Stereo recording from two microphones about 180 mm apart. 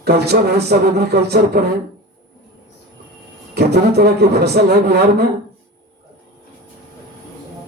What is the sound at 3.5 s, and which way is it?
A man's voice, 65° right (ahead or behind).